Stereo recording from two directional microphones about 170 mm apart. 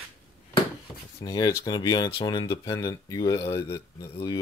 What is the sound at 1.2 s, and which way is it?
Speech, 20° left (ahead or behind).